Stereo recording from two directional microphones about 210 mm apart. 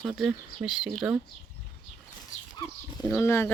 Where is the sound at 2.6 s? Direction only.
20° left (ahead or behind).